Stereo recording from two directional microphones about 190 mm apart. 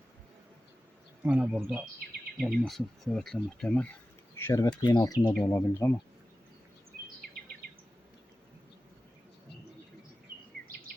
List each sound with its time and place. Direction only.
1.2 s speech: 5° right (ahead or behind); by 6.0 s 15° left (ahead or behind)